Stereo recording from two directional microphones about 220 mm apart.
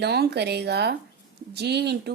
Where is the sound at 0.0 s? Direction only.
45° right (ahead or behind).